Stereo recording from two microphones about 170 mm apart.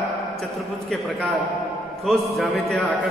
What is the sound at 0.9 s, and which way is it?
A man's voice, centre (ahead or behind).